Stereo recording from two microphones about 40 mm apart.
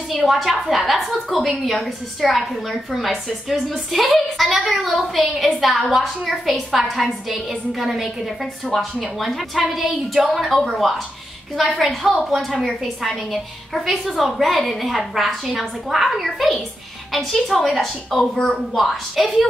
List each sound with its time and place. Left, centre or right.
0.1 s a woman's voice: centre
8.6 s a woman's voice: centre